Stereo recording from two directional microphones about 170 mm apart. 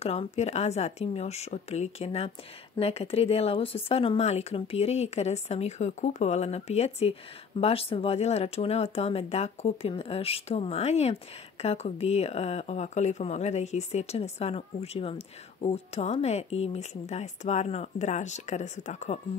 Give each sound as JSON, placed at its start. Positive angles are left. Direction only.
{"t": 0.0, "sound": "speech", "side_deg": 40}